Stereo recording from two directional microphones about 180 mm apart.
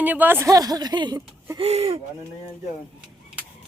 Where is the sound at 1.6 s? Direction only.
35° right (ahead or behind).